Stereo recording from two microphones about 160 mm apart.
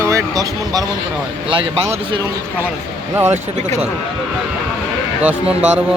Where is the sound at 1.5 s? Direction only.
30° right (ahead or behind).